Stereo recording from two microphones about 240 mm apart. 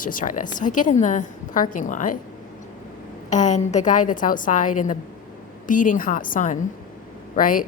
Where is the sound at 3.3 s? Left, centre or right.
Left.